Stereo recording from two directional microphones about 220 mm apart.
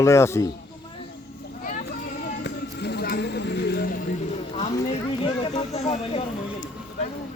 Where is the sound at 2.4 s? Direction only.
50° left (ahead or behind).